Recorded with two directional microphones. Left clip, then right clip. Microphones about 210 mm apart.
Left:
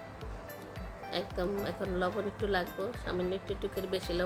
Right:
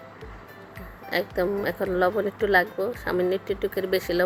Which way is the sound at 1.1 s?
25° right (ahead or behind).